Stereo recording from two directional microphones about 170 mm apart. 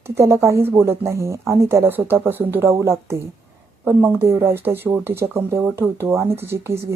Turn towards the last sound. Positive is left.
turn(degrees=-15)  # may be behind; listen again after turning